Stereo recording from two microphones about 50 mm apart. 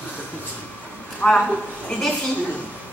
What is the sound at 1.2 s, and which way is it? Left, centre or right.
Speech, centre.